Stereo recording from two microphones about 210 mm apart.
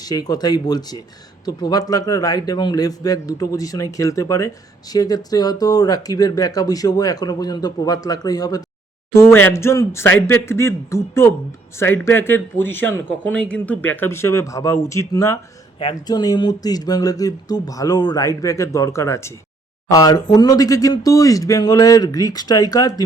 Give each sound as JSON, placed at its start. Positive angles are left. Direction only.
{"t": 0.0, "sound": "a man's voice", "side_deg": 15}